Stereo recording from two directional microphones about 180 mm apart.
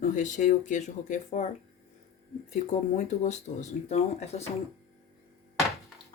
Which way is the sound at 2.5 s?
40° left (ahead or behind).